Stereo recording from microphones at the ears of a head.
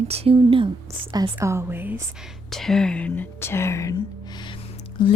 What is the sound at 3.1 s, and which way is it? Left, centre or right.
A woman's voice, left.